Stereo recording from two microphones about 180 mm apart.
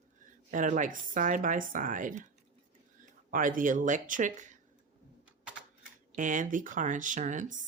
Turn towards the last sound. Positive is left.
turn(degrees=-45)  # may be behind; listen again after turning